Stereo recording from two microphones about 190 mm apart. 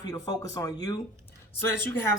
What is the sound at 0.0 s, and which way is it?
Speech, 20° left (ahead or behind).